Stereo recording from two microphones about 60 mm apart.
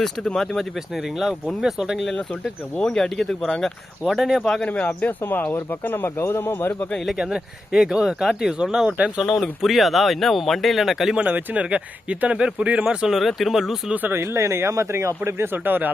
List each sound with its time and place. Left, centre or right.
0.0 s speech: centre
0.9 s speech: centre
2.7 s speech: centre
4.2 s speech: centre
5.2 s speech: left
6.9 s speech: centre
7.2 s speech: centre
9.2 s speech: centre
11.2 s speech: right
13.1 s speech: centre
13.9 s speech: right
14.2 s speech: right
15.5 s speech: right